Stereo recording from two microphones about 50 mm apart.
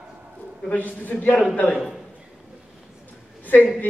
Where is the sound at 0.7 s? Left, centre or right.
Left.